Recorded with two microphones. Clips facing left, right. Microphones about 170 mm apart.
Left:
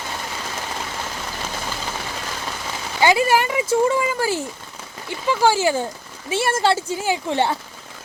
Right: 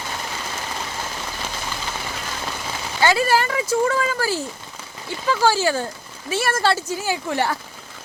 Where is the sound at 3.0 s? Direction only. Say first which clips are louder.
Left 2 dB; 20° left (ahead or behind).